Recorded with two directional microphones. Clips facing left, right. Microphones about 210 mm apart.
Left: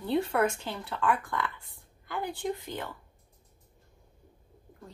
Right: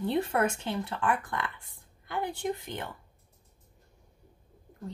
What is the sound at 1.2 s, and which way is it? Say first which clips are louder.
Speech: left 2 dB; 20° right (ahead or behind).